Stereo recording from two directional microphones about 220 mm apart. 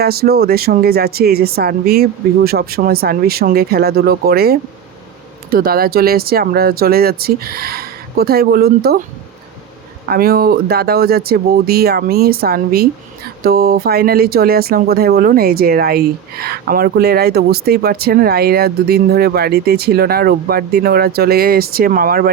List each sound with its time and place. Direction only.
0.0 s speech: 45° right (ahead or behind)
10.1 s speech: 45° right (ahead or behind)